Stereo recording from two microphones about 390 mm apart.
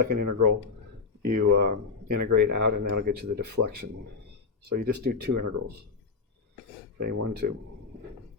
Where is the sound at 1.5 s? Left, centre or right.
Right.